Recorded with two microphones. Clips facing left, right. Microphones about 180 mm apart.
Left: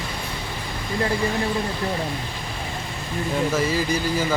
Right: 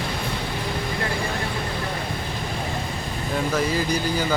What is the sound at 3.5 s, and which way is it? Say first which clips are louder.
Speech: left 1 dB; 5° left (ahead or behind).